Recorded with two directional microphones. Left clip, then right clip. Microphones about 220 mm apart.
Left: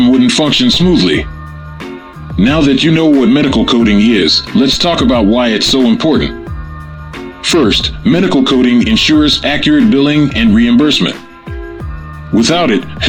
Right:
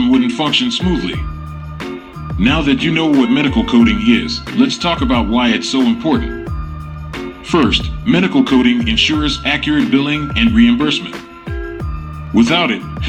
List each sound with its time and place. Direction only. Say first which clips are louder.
0.3 s speech: left 5 dB; 55° left (ahead or behind)
2.4 s speech: left 4 dB; 50° left (ahead or behind)
7.1 s music: even; centre (ahead or behind)
7.4 s speech: left 4 dB; 50° left (ahead or behind)
12.3 s speech: left 3 dB; 50° left (ahead or behind)